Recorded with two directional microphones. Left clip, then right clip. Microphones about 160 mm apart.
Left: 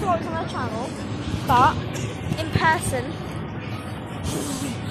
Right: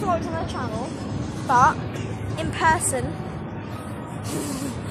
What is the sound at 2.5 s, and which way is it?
Speech, centre (ahead or behind).